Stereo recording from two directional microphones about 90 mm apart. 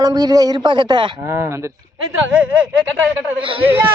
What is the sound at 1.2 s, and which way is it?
Speech, 30° right (ahead or behind).